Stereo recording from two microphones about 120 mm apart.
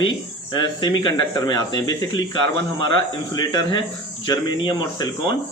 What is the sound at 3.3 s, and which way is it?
A man's voice, 35° left (ahead or behind).